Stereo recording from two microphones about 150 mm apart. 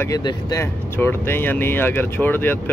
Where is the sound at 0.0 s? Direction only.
25° left (ahead or behind).